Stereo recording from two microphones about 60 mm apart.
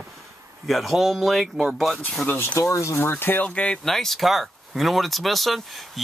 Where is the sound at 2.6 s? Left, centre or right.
Left.